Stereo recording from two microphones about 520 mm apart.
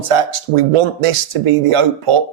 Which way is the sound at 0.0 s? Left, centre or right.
Right.